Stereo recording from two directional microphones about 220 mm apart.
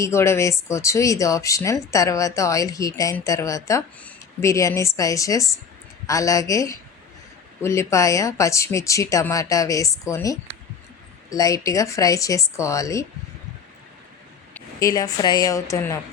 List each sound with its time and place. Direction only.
0.0 s speech: 10° left (ahead or behind)
14.5 s a woman's voice: 15° left (ahead or behind)